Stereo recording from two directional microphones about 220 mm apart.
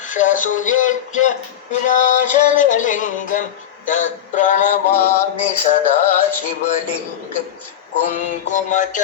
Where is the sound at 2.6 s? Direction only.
35° left (ahead or behind).